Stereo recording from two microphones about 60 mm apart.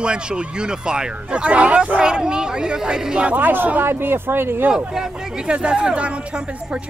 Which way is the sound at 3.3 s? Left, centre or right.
Right.